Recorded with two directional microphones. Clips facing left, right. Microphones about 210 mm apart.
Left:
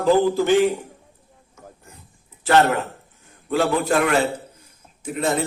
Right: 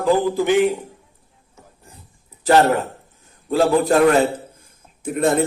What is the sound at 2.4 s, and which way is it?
A man's voice, 35° right (ahead or behind).